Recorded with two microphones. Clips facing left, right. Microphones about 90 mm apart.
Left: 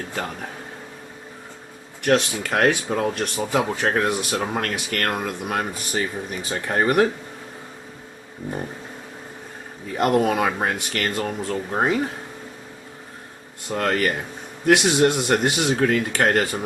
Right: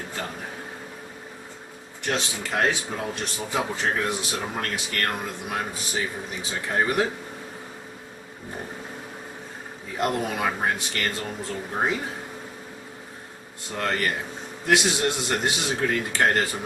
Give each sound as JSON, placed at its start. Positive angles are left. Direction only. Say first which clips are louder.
{"t": 2.0, "sound": "speech", "louder": "left 8 dB", "side_deg": 60}
{"t": 10.0, "sound": "speech", "louder": "left 6 dB", "side_deg": 60}
{"t": 13.7, "sound": "speech", "louder": "left 5 dB", "side_deg": 70}
{"t": 14.7, "sound": "speech", "louder": "left 6 dB", "side_deg": 60}